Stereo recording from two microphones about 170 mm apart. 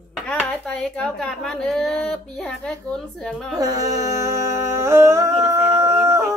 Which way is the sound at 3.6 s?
20° right (ahead or behind).